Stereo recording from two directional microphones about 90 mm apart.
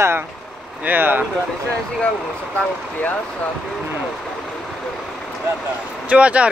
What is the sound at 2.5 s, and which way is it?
Speech, 15° left (ahead or behind).